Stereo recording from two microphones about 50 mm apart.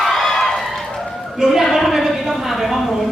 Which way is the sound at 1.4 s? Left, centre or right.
Centre.